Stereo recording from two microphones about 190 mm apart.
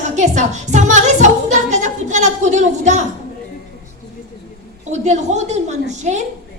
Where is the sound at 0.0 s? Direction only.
40° right (ahead or behind).